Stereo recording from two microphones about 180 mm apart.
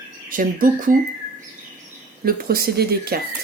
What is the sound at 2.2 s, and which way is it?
Speech, 55° right (ahead or behind).